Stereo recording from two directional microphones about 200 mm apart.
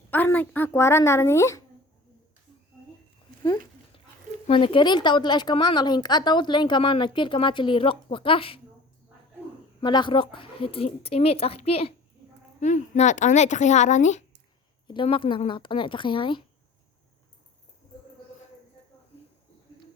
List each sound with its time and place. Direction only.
0.1 s speech: 10° left (ahead or behind)
4.4 s a woman's voice: 25° left (ahead or behind)
9.8 s a woman's voice: 25° left (ahead or behind)
14.8 s a woman's voice: 25° left (ahead or behind)